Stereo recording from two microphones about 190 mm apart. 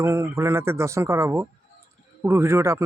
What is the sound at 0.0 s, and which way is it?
A man's voice, 15° right (ahead or behind).